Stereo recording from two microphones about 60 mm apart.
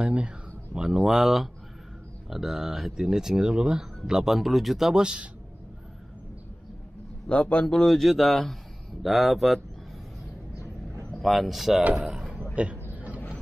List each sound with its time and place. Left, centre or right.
0.0 s speech: right
0.7 s speech: centre
7.2 s a man's voice: left; by 9.6 s centre
11.1 s speech: centre
11.8 s speech: right
12.1 s a sound: centre
12.6 s speech: right
12.9 s a sound: right